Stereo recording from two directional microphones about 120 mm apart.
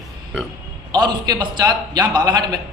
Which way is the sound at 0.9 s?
35° right (ahead or behind).